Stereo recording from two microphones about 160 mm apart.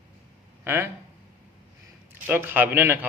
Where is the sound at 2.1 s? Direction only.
15° right (ahead or behind).